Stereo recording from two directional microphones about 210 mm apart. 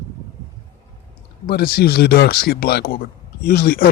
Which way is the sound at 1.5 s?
50° left (ahead or behind).